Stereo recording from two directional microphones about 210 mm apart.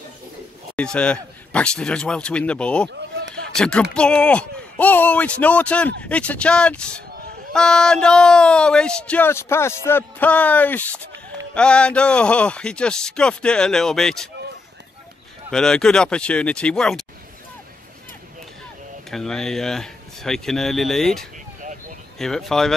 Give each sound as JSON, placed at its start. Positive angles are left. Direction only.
{"t": 0.7, "sound": "speech", "side_deg": 5}
{"t": 2.9, "sound": "speech", "side_deg": -55}
{"t": 3.5, "sound": "speech", "side_deg": 5}
{"t": 15.5, "sound": "speech", "side_deg": 5}
{"t": 19.0, "sound": "speech", "side_deg": 0}